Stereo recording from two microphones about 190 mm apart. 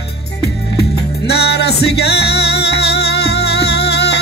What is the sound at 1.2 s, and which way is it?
Music, 60° left (ahead or behind).